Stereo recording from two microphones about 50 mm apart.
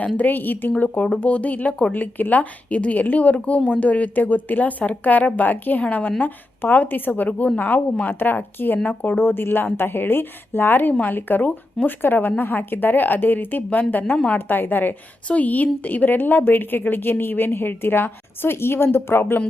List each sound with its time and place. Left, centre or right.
0.2 s a woman's voice: left